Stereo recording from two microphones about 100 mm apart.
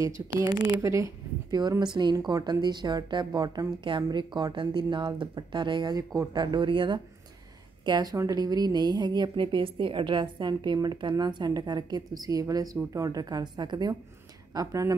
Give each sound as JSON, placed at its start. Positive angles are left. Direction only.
{"t": 0.0, "sound": "a woman's voice", "side_deg": -35}
{"t": 0.7, "sound": "speech", "side_deg": -30}
{"t": 1.6, "sound": "a woman's voice", "side_deg": -45}
{"t": 7.8, "sound": "a woman's voice", "side_deg": -40}